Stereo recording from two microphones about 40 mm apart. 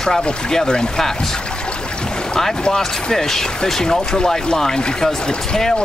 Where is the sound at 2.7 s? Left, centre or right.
Centre.